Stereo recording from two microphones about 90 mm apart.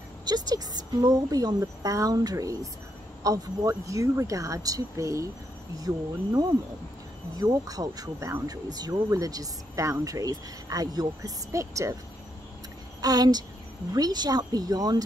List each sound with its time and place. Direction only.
0.2 s a woman's voice: 50° right (ahead or behind)
13.0 s a woman's voice: 45° right (ahead or behind)